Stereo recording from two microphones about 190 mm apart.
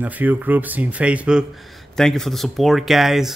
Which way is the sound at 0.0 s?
10° right (ahead or behind).